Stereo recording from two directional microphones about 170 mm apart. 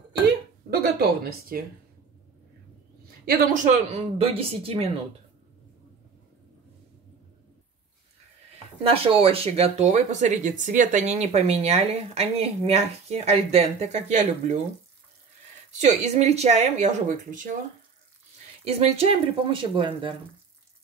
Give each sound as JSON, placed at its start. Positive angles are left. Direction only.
{"t": 0.7, "sound": "a sound", "side_deg": -65}
{"t": 3.3, "sound": "speech", "side_deg": -50}
{"t": 8.8, "sound": "speech", "side_deg": -35}
{"t": 15.8, "sound": "speech", "side_deg": -40}
{"t": 18.6, "sound": "speech", "side_deg": -35}